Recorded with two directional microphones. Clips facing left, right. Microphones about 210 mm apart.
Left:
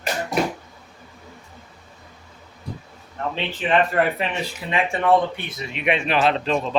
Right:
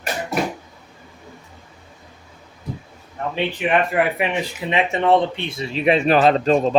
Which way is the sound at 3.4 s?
15° right (ahead or behind).